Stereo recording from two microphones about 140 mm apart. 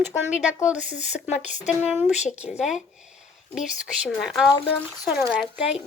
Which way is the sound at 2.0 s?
5° right (ahead or behind).